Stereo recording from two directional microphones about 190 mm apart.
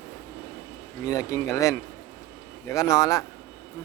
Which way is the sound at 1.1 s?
15° left (ahead or behind).